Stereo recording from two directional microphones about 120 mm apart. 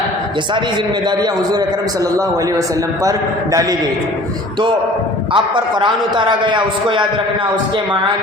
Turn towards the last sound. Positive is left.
turn(degrees=-40)  # may be behind; listen again after turning